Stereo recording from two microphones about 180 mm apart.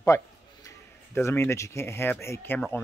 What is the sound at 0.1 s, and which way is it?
Speech, 15° left (ahead or behind).